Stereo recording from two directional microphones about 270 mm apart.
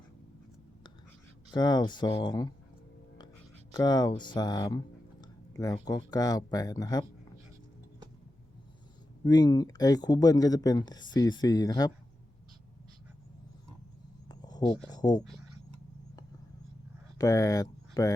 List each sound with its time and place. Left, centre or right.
1.5 s speech: centre
3.7 s speech: centre
9.2 s speech: centre
14.3 s a sound: centre
14.8 s speech: centre
17.2 s speech: centre